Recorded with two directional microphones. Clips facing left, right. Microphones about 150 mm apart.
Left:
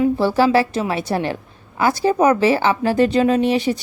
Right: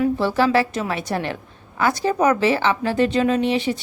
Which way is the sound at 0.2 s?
35° left (ahead or behind).